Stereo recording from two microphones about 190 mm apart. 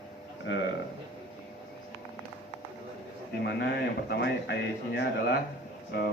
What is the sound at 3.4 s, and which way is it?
Speech, 65° left (ahead or behind).